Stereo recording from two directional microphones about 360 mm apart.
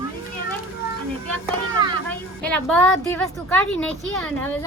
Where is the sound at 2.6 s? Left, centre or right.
Centre.